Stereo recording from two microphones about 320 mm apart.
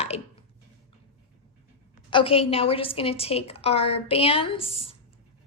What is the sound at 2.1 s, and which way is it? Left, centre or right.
A woman's voice, centre.